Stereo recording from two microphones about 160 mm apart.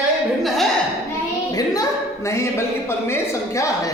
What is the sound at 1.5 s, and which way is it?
Speech, 20° left (ahead or behind).